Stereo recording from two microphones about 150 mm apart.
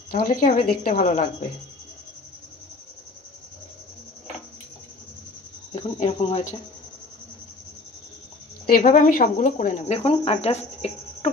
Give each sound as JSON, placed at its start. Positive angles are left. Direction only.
{"t": 0.1, "sound": "a woman's voice", "side_deg": 70}
{"t": 5.9, "sound": "speech", "side_deg": 45}
{"t": 8.6, "sound": "speech", "side_deg": 70}
{"t": 9.9, "sound": "speech", "side_deg": 40}